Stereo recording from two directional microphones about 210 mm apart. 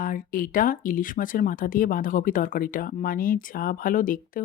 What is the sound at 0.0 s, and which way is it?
A woman's voice, 40° left (ahead or behind).